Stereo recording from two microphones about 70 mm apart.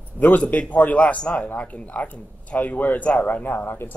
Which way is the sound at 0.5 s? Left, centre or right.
Left.